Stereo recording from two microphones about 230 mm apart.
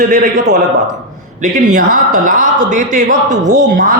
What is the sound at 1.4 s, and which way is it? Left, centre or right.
Speech, right.